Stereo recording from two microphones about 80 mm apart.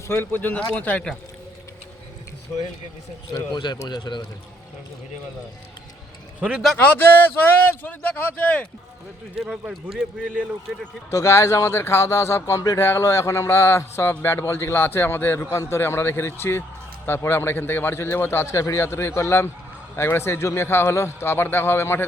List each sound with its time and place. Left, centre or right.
0.1 s speech: left
3.5 s a man's voice: left
6.7 s speech: left
9.4 s speech: centre
11.1 s speech: left
14.4 s speech: left